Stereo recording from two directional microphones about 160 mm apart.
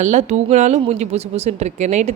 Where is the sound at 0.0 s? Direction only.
45° right (ahead or behind).